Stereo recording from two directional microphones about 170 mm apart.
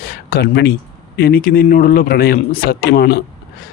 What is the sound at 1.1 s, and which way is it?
A man's voice, 60° left (ahead or behind).